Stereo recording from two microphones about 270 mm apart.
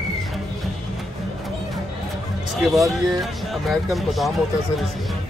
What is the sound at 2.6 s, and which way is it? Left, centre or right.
Speech, centre.